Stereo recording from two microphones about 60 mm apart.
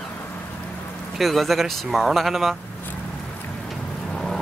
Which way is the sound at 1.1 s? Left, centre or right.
Centre.